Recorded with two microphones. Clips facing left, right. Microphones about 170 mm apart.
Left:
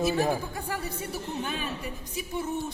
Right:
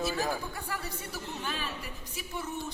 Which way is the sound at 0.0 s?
20° left (ahead or behind).